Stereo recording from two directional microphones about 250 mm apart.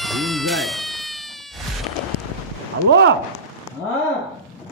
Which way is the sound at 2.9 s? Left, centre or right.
Right.